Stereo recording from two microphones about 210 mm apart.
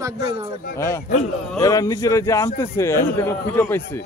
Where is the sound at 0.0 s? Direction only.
20° right (ahead or behind).